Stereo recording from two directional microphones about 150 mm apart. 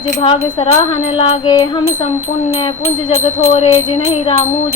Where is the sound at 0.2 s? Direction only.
35° left (ahead or behind).